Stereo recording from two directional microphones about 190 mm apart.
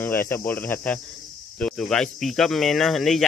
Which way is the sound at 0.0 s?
10° left (ahead or behind).